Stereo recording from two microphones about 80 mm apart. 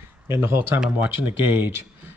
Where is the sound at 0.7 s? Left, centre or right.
Centre.